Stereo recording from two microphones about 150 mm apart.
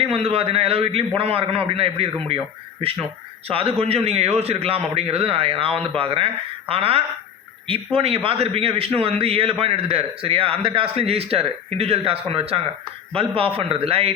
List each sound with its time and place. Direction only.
0.1 s a man's voice: 40° right (ahead or behind)
3.5 s a man's voice: 40° right (ahead or behind)